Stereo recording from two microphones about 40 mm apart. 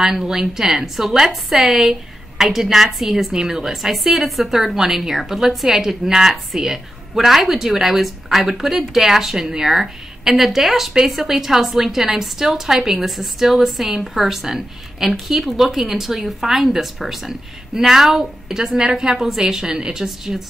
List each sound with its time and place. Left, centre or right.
0.0 s a woman's voice: centre
20.1 s speech: centre